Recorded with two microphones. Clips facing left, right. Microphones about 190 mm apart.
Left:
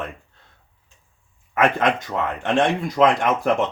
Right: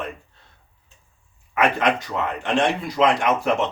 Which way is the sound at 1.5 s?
50° left (ahead or behind).